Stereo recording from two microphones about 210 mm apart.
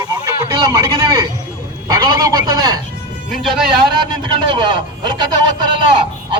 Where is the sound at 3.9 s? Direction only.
20° right (ahead or behind).